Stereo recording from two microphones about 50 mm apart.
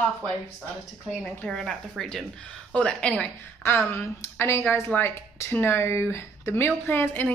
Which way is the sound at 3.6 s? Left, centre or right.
Left.